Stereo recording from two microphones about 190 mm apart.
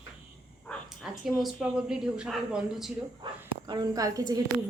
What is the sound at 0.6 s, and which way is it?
Speech, centre (ahead or behind).